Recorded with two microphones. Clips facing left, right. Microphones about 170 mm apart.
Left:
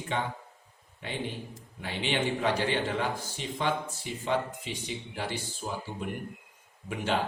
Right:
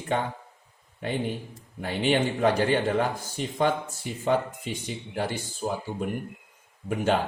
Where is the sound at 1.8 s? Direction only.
45° right (ahead or behind).